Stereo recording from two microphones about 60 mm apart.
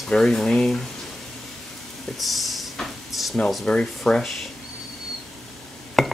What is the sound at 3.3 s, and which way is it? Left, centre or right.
Speech, centre.